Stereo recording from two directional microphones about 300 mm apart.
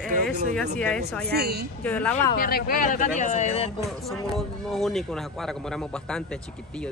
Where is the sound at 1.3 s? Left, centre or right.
Right.